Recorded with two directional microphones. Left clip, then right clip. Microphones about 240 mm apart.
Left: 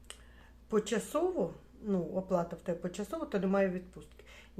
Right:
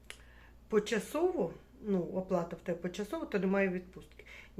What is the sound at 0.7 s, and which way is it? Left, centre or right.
Speech, centre.